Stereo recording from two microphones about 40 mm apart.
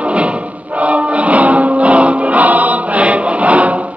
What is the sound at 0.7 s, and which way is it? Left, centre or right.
Music, right.